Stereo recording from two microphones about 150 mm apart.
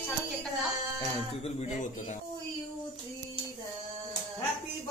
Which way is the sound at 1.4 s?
45° left (ahead or behind).